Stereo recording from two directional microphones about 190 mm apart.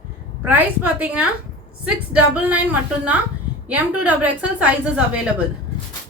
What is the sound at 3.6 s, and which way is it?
A woman's voice, 10° right (ahead or behind).